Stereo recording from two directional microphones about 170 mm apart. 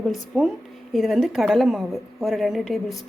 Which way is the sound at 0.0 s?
Centre (ahead or behind).